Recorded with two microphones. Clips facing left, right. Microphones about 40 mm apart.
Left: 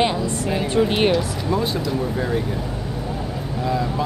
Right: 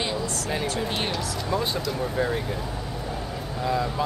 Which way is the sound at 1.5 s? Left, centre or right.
Centre.